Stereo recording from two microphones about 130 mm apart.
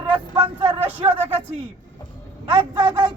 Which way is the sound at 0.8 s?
15° right (ahead or behind).